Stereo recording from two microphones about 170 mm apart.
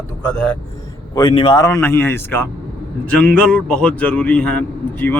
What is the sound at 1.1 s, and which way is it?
A man's voice, 25° left (ahead or behind).